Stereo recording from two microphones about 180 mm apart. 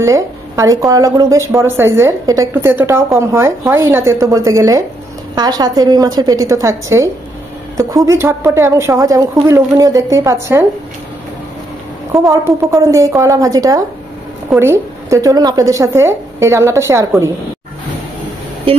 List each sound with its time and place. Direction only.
0.0 s a woman's voice: 15° right (ahead or behind)
12.1 s speech: 15° right (ahead or behind)